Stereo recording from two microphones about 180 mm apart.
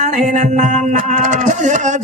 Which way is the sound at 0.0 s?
40° right (ahead or behind).